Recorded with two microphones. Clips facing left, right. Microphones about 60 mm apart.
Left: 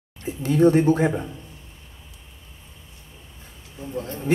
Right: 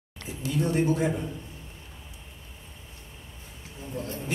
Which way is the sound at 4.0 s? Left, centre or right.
Left.